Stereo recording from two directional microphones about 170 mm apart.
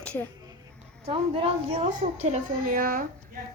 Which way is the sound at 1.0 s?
35° right (ahead or behind).